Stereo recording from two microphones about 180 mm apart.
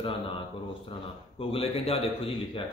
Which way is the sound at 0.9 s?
30° left (ahead or behind).